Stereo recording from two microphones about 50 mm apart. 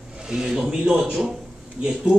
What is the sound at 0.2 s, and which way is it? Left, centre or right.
Speech, centre.